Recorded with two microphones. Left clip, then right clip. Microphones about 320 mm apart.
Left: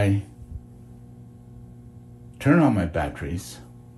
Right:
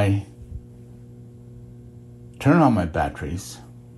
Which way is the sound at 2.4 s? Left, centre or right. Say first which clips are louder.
Right 2 dB; centre.